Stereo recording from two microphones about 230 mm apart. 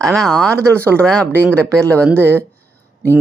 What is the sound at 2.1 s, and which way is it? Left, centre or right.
Speech, centre.